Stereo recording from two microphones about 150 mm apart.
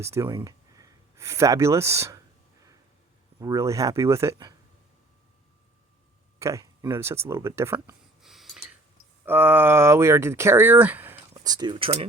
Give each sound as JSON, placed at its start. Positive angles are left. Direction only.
{"t": 0.0, "sound": "speech", "side_deg": -20}
{"t": 3.4, "sound": "speech", "side_deg": -20}
{"t": 6.4, "sound": "speech", "side_deg": -20}
{"t": 8.2, "sound": "a sound", "side_deg": 0}
{"t": 9.2, "sound": "speech", "side_deg": -15}
{"t": 11.3, "sound": "speech", "side_deg": -25}